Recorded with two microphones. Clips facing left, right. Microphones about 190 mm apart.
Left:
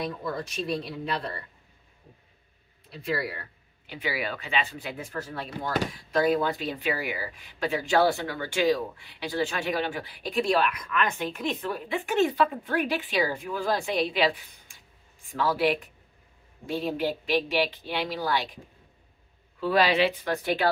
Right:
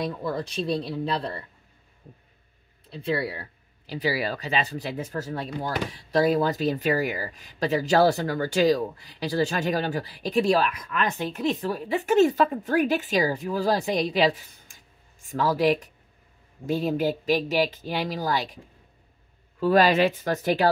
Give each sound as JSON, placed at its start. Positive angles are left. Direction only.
{"t": 0.2, "sound": "speech", "side_deg": -30}
{"t": 2.9, "sound": "speech", "side_deg": -30}
{"t": 19.6, "sound": "speech", "side_deg": -45}